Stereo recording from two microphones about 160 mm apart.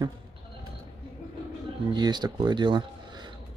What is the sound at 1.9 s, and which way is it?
Speech, 25° right (ahead or behind).